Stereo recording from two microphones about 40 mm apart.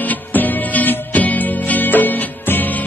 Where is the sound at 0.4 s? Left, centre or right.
Left.